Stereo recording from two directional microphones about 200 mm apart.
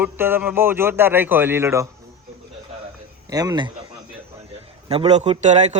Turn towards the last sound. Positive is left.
turn(degrees=-35)  # may be behind; listen again after turning